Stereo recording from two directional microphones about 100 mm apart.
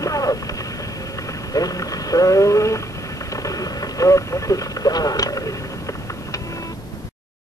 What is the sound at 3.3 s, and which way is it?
Vehicle, 35° left (ahead or behind).